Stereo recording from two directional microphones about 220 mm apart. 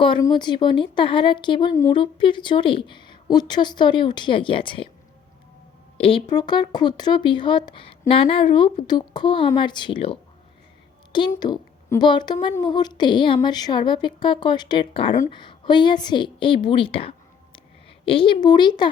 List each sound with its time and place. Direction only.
0.0 s speech: 20° left (ahead or behind)
6.0 s speech: 25° left (ahead or behind)
16.6 s a sound: 25° left (ahead or behind)
18.0 s speech: 25° left (ahead or behind)